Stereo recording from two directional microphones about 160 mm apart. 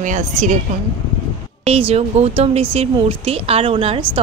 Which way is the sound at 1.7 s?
40° right (ahead or behind).